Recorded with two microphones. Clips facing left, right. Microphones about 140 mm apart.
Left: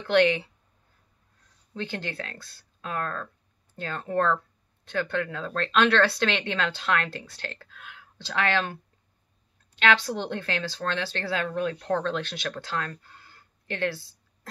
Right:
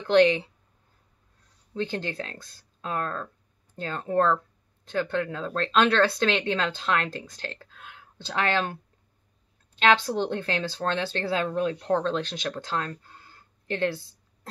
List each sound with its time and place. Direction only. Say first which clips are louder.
0.1 s speech: right 2 dB; 35° right (ahead or behind)
1.7 s speech: right 3 dB; 25° right (ahead or behind)
9.8 s speech: right 2 dB; 35° right (ahead or behind)
13.2 s a sound: right 1 dB; 30° right (ahead or behind)